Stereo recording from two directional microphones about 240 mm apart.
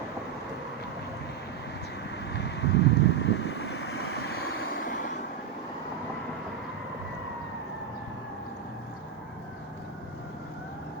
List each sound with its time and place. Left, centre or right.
2.3 s vehicle: left
3.8 s vehicle: left
4.7 s vehicle: left